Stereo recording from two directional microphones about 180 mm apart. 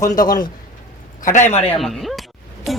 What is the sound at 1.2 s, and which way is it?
Speech, 45° left (ahead or behind).